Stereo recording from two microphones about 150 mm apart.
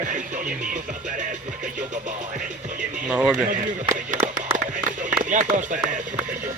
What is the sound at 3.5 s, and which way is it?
Music, 60° right (ahead or behind).